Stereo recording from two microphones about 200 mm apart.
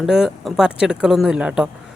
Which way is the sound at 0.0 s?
Centre (ahead or behind).